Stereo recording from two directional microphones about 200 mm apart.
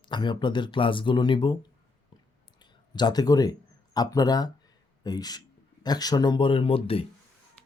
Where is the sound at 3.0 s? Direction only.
20° left (ahead or behind).